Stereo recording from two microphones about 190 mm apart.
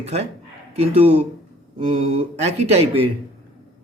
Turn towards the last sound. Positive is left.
turn(degrees=-30)  # may be behind; listen again after turning